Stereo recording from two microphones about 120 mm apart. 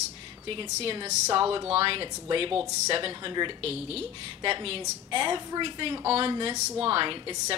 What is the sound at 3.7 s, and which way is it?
A woman's voice, 55° right (ahead or behind).